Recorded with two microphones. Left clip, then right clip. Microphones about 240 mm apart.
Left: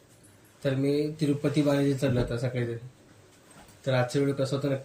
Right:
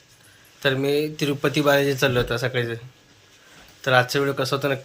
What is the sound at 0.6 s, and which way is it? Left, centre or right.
Speech, right.